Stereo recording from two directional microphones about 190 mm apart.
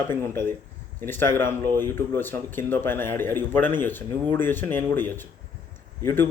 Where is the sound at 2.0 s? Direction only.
10° left (ahead or behind).